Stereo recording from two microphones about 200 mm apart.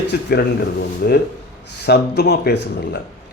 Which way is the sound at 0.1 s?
55° left (ahead or behind).